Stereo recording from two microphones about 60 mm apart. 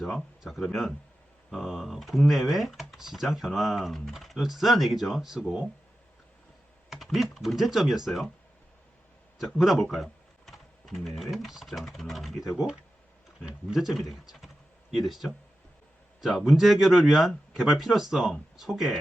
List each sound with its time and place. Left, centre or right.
0.0 s speech: centre
6.9 s speech: centre
9.6 s speech: centre
13.7 s speech: centre
16.5 s speech: centre